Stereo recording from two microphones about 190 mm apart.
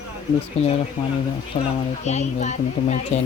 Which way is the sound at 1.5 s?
30° left (ahead or behind).